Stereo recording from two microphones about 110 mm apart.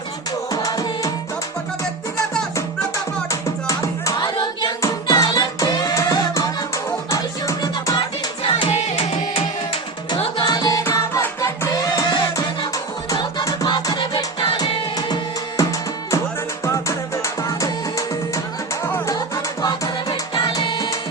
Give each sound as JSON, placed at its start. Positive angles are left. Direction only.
{"t": 0.5, "sound": "music", "side_deg": 35}
{"t": 3.2, "sound": "music", "side_deg": 30}
{"t": 8.4, "sound": "music", "side_deg": 50}
{"t": 8.7, "sound": "music", "side_deg": 65}
{"t": 10.4, "sound": "music", "side_deg": 35}
{"t": 13.7, "sound": "music", "side_deg": 45}
{"t": 16.6, "sound": "music", "side_deg": 25}
{"t": 19.6, "sound": "music", "side_deg": 35}